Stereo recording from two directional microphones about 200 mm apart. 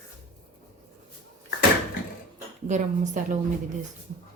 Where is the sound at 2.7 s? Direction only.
35° right (ahead or behind).